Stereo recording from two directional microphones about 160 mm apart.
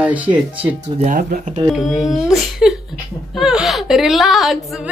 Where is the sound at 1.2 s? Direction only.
65° right (ahead or behind).